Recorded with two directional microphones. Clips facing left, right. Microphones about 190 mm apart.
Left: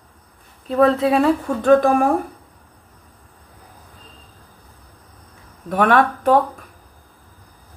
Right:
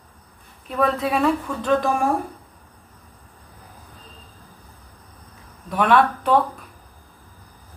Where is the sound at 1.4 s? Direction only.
50° left (ahead or behind).